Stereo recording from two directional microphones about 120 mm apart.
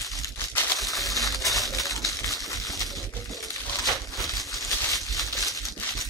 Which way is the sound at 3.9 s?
Centre (ahead or behind).